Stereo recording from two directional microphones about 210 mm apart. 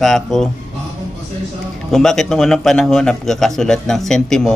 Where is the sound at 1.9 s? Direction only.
Centre (ahead or behind).